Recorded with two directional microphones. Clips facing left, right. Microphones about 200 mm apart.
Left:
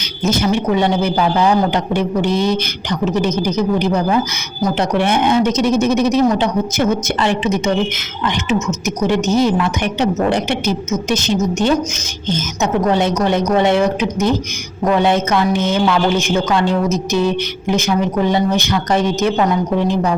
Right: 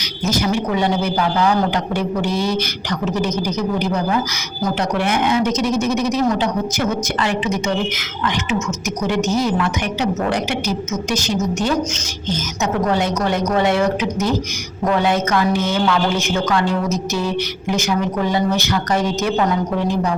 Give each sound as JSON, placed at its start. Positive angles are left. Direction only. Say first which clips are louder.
{"t": 0.3, "sound": "a man's voice", "louder": "left 3 dB", "side_deg": 25}